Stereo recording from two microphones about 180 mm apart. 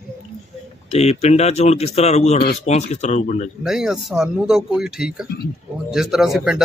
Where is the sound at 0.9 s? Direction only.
35° left (ahead or behind).